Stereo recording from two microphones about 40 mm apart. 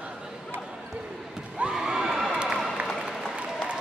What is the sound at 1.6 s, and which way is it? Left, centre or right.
Children shouting, centre.